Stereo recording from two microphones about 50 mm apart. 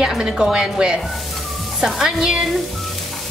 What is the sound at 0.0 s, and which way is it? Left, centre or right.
Stir, centre.